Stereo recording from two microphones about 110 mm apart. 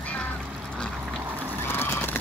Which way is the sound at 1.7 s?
20° left (ahead or behind).